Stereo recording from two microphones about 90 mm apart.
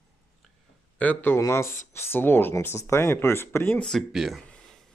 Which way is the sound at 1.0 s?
20° left (ahead or behind).